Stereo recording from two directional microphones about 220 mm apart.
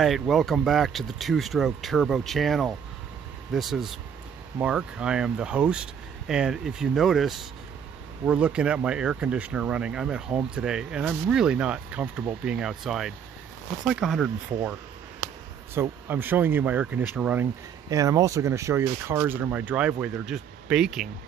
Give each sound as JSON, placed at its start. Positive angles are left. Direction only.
{"t": 0.0, "sound": "speech", "side_deg": 0}